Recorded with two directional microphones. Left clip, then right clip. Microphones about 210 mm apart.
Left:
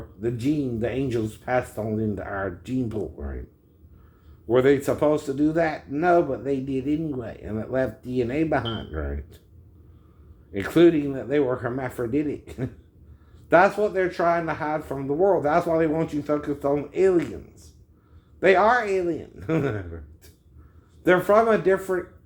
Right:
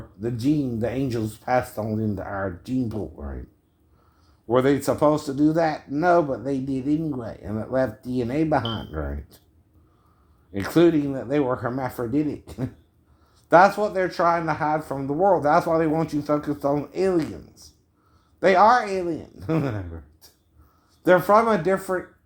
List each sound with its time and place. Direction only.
0.2 s speech: 35° right (ahead or behind)
4.4 s speech: 35° right (ahead or behind)
10.5 s speech: 35° right (ahead or behind)
21.0 s speech: 35° right (ahead or behind)